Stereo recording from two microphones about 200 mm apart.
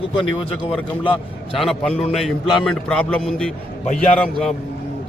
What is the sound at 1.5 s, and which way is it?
A man's voice, centre (ahead or behind).